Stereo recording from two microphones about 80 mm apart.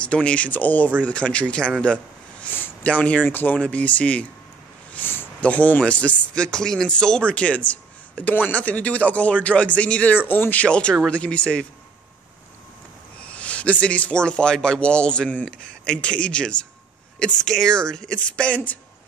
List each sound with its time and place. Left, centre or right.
0.0 s speech: centre
10.2 s speech: left
13.2 s speech: centre